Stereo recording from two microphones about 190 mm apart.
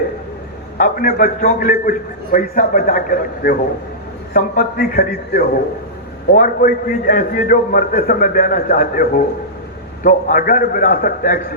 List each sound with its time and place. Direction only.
0.8 s a man's voice: 50° left (ahead or behind)